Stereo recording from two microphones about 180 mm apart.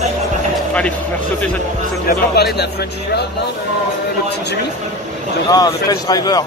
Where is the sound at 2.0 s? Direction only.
60° left (ahead or behind).